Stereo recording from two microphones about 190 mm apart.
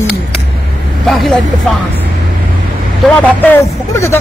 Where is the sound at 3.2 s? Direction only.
10° left (ahead or behind).